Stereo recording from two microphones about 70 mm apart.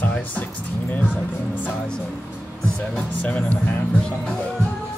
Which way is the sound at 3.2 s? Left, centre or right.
Centre.